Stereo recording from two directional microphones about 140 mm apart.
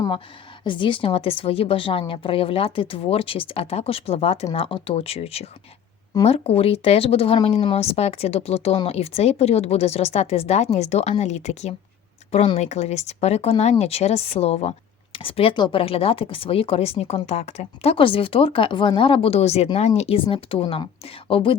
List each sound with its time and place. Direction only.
0.6 s speech: 35° left (ahead or behind)